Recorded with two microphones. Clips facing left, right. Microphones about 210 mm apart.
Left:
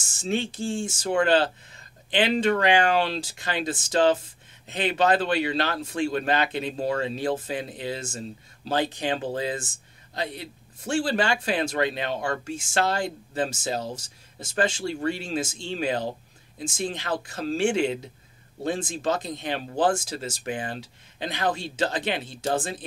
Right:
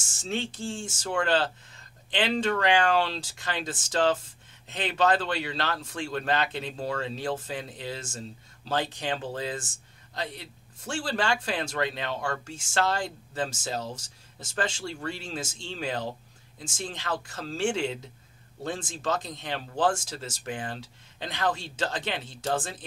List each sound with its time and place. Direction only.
0.3 s a man's voice: 10° left (ahead or behind)
17.1 s speech: 35° left (ahead or behind)
17.4 s speech: 10° left (ahead or behind)